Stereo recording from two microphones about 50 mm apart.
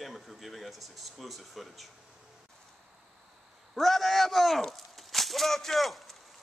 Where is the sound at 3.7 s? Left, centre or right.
Centre.